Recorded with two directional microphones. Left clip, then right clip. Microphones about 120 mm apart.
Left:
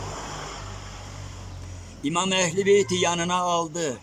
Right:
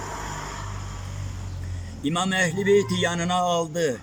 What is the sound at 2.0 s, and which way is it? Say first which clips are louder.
Speech: even; 25° left (ahead or behind).